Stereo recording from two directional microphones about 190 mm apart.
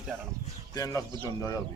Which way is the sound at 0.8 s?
20° left (ahead or behind).